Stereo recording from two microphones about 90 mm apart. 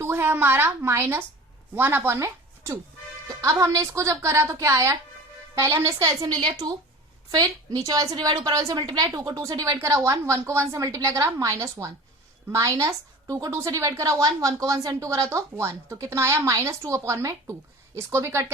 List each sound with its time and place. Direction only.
0.0 s speech: 25° right (ahead or behind)
7.3 s a woman's voice: 45° right (ahead or behind)